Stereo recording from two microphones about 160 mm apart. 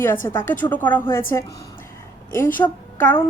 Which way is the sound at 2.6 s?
10° left (ahead or behind).